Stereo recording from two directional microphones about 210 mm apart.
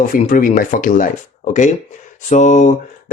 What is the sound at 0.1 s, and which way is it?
A man's voice, 40° left (ahead or behind).